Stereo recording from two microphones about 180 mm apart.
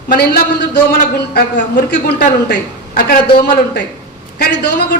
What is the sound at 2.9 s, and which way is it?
Speech, 50° left (ahead or behind).